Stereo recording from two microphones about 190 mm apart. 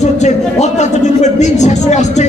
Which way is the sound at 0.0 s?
40° left (ahead or behind).